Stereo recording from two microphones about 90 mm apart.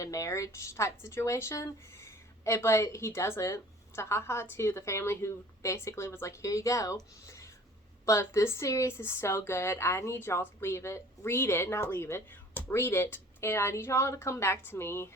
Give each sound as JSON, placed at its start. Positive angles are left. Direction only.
{"t": 0.0, "sound": "speech", "side_deg": 35}